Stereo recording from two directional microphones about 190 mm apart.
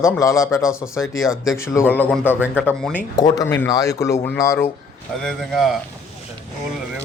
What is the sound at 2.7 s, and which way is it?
Speech, 10° left (ahead or behind).